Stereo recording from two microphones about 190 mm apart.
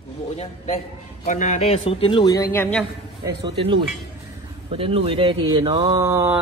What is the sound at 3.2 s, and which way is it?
Speech, 25° right (ahead or behind).